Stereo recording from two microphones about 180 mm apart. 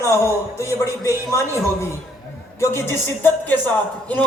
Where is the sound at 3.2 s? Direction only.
10° left (ahead or behind).